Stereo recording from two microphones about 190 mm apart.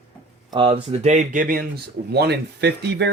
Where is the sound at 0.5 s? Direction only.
25° right (ahead or behind); by 1.6 s 45° right (ahead or behind).